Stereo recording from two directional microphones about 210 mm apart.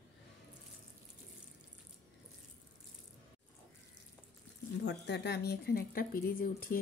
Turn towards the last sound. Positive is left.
turn(degrees=45)  # may be behind; listen again after turning